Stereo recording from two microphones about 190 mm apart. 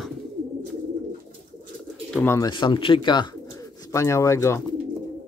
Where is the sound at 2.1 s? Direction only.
10° left (ahead or behind).